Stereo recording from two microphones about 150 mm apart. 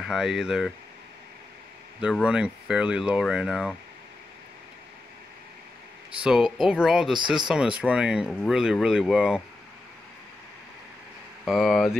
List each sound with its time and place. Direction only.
0.0 s speech: 5° right (ahead or behind)
2.2 s speech: 5° right (ahead or behind)
6.2 s speech: 5° right (ahead or behind)
7.2 s speech: 30° right (ahead or behind)
7.4 s speech: 5° right (ahead or behind)
11.4 s speech: centre (ahead or behind)